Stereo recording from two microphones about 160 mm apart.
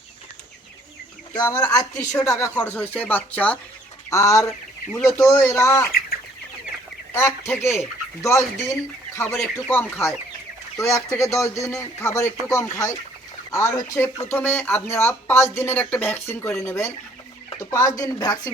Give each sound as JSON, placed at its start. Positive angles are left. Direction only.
{"t": 1.3, "sound": "a man's voice", "side_deg": 25}
{"t": 4.1, "sound": "a man's voice", "side_deg": 20}
{"t": 7.1, "sound": "a man's voice", "side_deg": 15}